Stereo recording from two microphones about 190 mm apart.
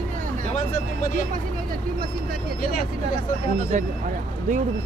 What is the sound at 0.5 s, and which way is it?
Speech, 40° left (ahead or behind).